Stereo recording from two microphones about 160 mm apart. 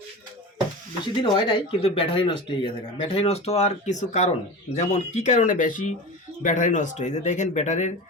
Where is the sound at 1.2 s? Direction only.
30° left (ahead or behind).